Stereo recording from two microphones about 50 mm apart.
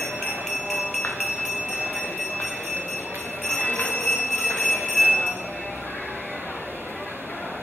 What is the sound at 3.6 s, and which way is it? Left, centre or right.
Train, left.